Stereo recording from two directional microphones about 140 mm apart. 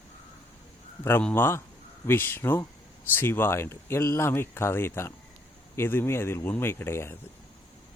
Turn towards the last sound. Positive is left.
turn(degrees=15)  # may be behind; listen again after turning